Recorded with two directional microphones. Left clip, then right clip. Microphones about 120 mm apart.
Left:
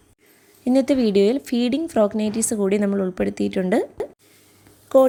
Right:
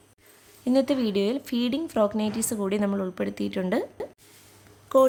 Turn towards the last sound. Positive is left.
turn(degrees=30)  # may be behind; listen again after turning